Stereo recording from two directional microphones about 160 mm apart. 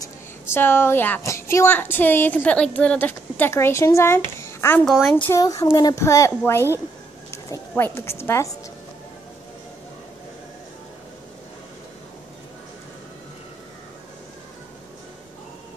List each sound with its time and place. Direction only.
0.0 s a woman's voice: 15° left (ahead or behind)
4.8 s speech: centre (ahead or behind)
5.1 s speech: 15° left (ahead or behind)